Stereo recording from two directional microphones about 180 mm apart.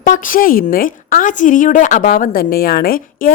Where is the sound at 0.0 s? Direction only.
50° left (ahead or behind).